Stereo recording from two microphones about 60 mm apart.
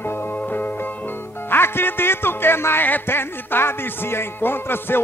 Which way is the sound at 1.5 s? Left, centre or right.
Left.